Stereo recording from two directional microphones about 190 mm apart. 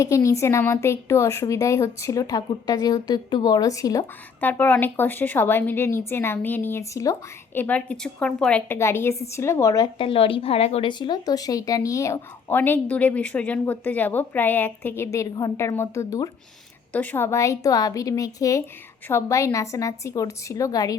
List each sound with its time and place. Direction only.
0.0 s speech: 15° left (ahead or behind)